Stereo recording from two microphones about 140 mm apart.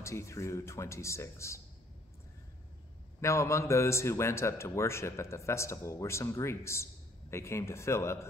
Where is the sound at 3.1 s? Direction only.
20° left (ahead or behind).